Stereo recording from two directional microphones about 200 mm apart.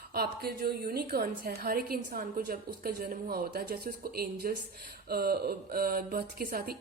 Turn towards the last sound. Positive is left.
turn(degrees=-50)  # may be behind; listen again after turning